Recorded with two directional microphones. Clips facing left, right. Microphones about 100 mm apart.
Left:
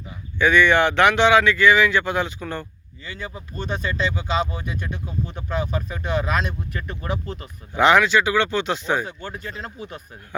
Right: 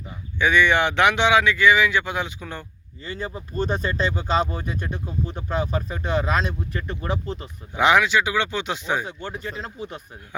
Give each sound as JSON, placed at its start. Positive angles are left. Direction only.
{"t": 0.3, "sound": "speech", "side_deg": -15}
{"t": 3.0, "sound": "speech", "side_deg": -35}
{"t": 7.7, "sound": "speech", "side_deg": -10}